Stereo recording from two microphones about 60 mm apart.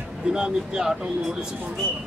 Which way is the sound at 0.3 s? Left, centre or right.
Centre.